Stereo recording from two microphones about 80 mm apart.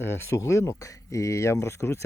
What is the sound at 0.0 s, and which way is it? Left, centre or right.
Speech, left.